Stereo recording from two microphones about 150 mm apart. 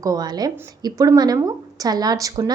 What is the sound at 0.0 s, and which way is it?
A woman's voice, 25° right (ahead or behind).